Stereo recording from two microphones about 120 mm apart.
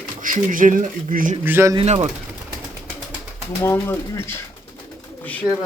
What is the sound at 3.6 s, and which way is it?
Speech, 20° left (ahead or behind).